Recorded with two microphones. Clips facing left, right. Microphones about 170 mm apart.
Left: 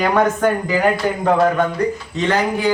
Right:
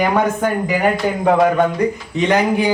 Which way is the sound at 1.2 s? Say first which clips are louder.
Right 2 dB; 10° right (ahead or behind).